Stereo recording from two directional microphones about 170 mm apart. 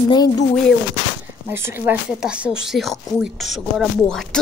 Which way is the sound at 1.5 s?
15° right (ahead or behind).